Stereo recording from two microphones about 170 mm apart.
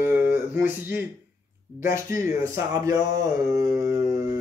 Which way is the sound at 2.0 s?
15° right (ahead or behind).